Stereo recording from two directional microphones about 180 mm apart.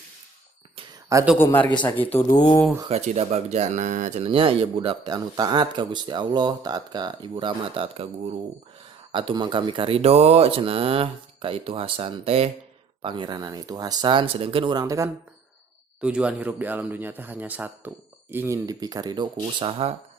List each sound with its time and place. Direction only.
1.1 s speech: 10° right (ahead or behind)
1.4 s speech: 10° left (ahead or behind)
2.3 s speech: 25° left (ahead or behind)
2.9 s speech: 35° right (ahead or behind)
9.1 s speech: 25° right (ahead or behind)
16.0 s speech: 5° right (ahead or behind); by 19.9 s 30° right (ahead or behind)